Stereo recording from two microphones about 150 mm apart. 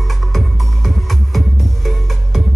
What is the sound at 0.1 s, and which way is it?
Music, centre (ahead or behind).